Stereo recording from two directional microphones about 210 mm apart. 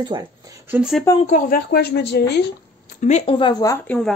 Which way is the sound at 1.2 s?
40° left (ahead or behind).